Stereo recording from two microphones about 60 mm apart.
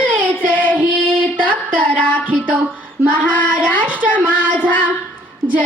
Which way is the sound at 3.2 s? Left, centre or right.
Left.